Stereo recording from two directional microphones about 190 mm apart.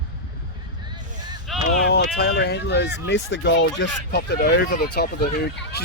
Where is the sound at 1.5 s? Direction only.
Centre (ahead or behind).